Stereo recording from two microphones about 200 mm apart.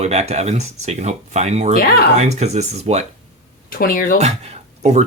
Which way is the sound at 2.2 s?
35° right (ahead or behind).